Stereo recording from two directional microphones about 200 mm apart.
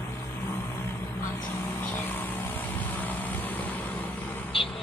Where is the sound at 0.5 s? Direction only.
10° left (ahead or behind).